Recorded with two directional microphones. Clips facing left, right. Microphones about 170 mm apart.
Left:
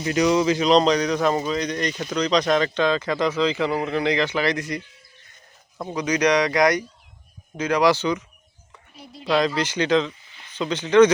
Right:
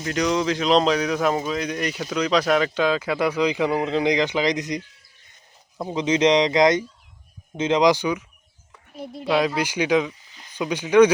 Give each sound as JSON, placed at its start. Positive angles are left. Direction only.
{"t": 0.0, "sound": "speech", "side_deg": 5}
{"t": 5.9, "sound": "speech", "side_deg": -25}
{"t": 9.2, "sound": "speech", "side_deg": -5}